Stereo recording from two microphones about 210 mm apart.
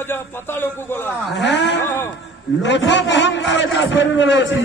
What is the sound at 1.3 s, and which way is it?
A man's voice, 55° left (ahead or behind).